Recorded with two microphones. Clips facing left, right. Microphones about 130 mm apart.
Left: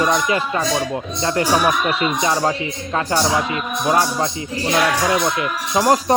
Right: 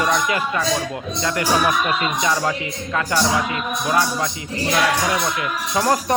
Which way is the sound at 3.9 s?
30° left (ahead or behind).